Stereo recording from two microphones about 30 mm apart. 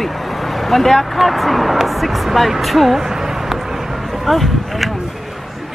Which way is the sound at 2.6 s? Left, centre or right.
Centre.